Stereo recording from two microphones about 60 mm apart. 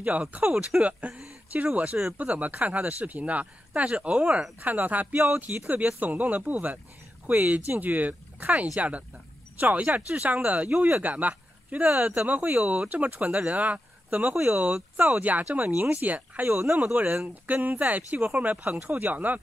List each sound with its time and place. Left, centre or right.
0.0 s speech: right
14.3 s speech: right